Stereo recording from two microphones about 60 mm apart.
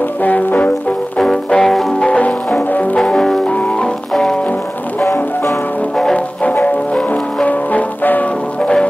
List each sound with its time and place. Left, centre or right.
0.2 s brass instrument: left
1.1 s music: centre
2.0 s music: centre
3.0 s music: centre
3.4 s music: centre
4.1 s music: centre
5.0 s music: left
6.5 s music: left
8.5 s music: centre